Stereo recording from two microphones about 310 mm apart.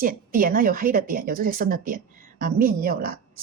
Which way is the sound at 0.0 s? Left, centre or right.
Right.